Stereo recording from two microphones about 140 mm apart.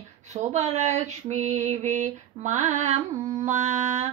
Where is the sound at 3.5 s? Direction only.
55° right (ahead or behind).